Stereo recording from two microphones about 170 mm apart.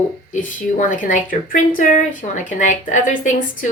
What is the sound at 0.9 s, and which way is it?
A woman's voice, 50° left (ahead or behind).